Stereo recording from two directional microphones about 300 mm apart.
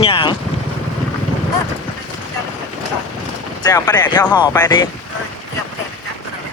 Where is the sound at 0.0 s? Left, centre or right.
Centre.